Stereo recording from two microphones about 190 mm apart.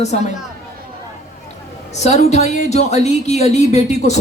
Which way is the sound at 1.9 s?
35° left (ahead or behind).